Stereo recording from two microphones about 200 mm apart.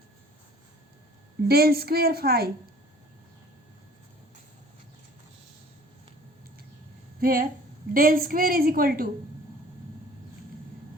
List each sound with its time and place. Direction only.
1.5 s a woman's voice: 50° right (ahead or behind)
7.2 s a woman's voice: 45° right (ahead or behind)